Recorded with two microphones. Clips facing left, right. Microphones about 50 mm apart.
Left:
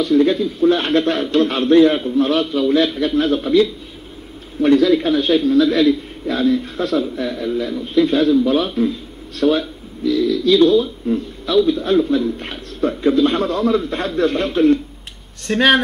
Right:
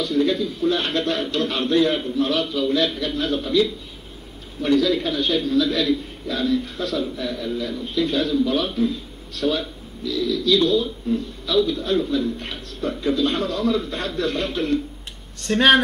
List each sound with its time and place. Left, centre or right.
0.0 s a man's voice: left
15.5 s a man's voice: centre